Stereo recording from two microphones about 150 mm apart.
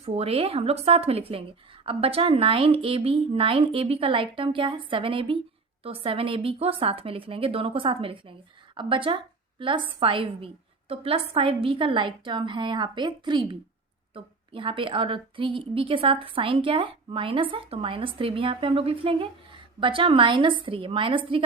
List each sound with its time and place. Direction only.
0.0 s a woman's voice: 40° right (ahead or behind)